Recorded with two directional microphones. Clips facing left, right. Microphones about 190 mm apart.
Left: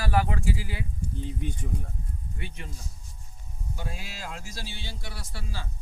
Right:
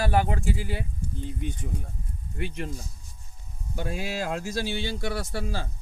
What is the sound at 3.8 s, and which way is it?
A man's voice, 65° right (ahead or behind).